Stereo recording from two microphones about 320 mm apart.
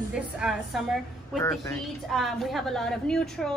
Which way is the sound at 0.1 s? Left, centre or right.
Centre.